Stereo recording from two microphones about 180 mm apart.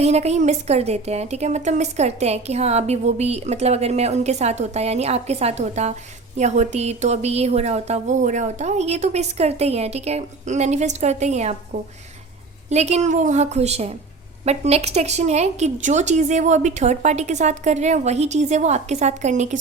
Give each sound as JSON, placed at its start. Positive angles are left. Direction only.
{"t": 0.0, "sound": "a woman's voice", "side_deg": -35}
{"t": 12.7, "sound": "a woman's voice", "side_deg": -40}